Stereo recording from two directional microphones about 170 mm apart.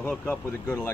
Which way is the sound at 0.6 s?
20° left (ahead or behind).